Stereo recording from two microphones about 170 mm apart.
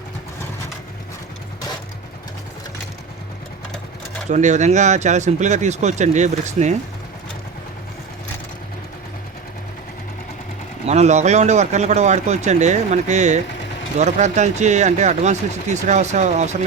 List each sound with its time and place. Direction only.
4.3 s speech: 45° right (ahead or behind)
10.8 s speech: 40° right (ahead or behind)